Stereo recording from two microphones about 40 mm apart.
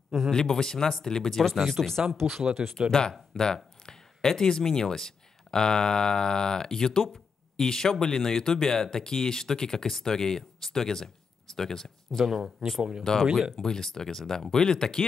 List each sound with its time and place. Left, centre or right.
0.3 s speech: centre
2.2 s speech: centre
2.9 s speech: centre
12.4 s speech: centre
13.0 s speech: centre
13.3 s speech: centre
13.6 s speech: centre